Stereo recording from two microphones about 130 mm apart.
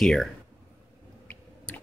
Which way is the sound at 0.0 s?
5° left (ahead or behind).